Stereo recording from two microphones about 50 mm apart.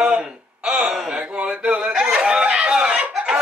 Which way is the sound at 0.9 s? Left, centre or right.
Centre.